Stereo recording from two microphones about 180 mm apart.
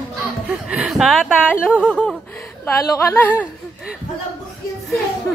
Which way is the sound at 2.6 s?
15° left (ahead or behind).